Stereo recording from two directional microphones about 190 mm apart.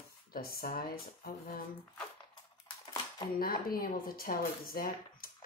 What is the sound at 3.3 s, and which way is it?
Speech, 50° left (ahead or behind).